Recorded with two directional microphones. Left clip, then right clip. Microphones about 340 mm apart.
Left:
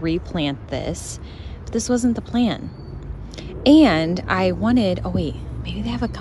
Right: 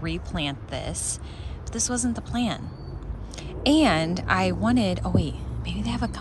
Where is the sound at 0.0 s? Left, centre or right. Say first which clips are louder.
Left 7 dB; centre.